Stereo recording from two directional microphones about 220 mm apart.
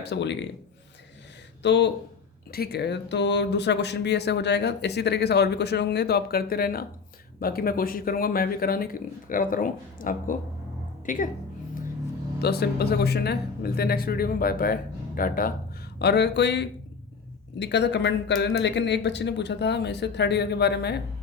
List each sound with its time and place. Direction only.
0.0 s speech: 50° left (ahead or behind)
1.6 s a woman's voice: 50° left (ahead or behind)
12.4 s speech: 45° left (ahead or behind)